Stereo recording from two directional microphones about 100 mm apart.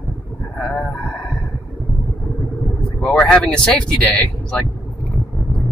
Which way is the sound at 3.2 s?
5° left (ahead or behind).